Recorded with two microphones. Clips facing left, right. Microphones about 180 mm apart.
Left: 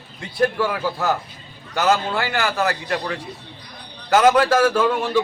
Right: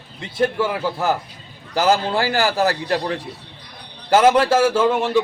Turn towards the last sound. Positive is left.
turn(degrees=-25)  # may be behind; listen again after turning